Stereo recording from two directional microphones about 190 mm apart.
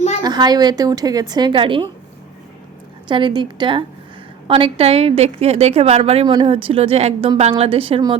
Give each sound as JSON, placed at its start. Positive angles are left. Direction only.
{"t": 0.2, "sound": "speech", "side_deg": -20}
{"t": 3.1, "sound": "a woman's voice", "side_deg": -25}